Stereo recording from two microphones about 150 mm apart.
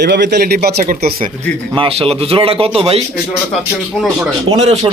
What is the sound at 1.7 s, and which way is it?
A man's voice, 35° right (ahead or behind).